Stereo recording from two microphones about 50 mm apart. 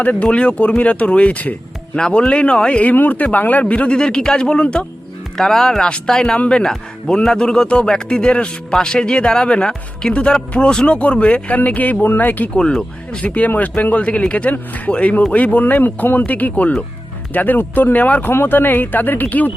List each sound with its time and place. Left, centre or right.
0.0 s speech: left
2.0 s speech: centre
2.9 s speech: left
5.4 s speech: centre; by 18.3 s left
18.3 s speech: left